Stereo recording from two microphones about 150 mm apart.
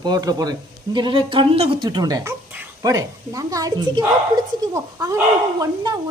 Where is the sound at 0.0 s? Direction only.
25° right (ahead or behind).